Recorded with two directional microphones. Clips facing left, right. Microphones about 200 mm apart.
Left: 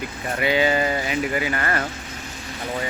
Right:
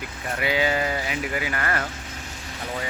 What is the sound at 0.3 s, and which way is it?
Speech, 5° right (ahead or behind).